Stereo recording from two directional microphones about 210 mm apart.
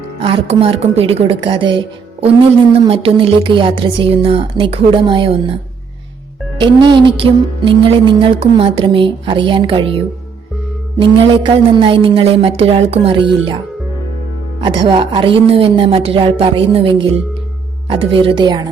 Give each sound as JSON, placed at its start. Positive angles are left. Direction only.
{"t": 0.2, "sound": "music", "side_deg": -25}
{"t": 6.6, "sound": "music", "side_deg": -20}
{"t": 14.6, "sound": "music", "side_deg": -20}